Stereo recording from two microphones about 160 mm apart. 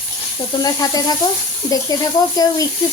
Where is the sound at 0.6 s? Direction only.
25° left (ahead or behind).